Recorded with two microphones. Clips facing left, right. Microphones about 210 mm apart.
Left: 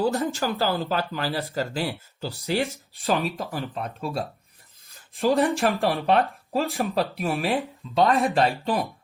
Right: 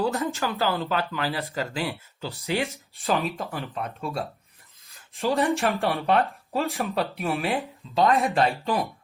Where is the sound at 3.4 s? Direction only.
35° left (ahead or behind).